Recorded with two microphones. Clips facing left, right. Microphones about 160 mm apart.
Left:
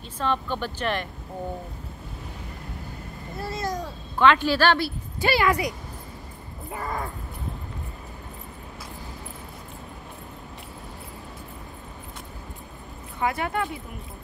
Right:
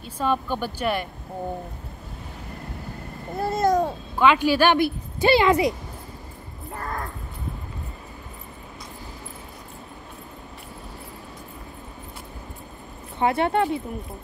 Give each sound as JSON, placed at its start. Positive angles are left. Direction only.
{"t": 0.2, "sound": "a woman's voice", "side_deg": -10}
{"t": 3.3, "sound": "a child's voice", "side_deg": -50}
{"t": 4.2, "sound": "a woman's voice", "side_deg": -10}
{"t": 6.7, "sound": "speech", "side_deg": 5}
{"t": 13.2, "sound": "speech", "side_deg": -30}